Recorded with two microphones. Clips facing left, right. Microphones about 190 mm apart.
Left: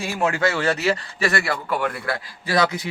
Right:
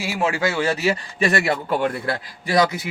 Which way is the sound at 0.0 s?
5° right (ahead or behind).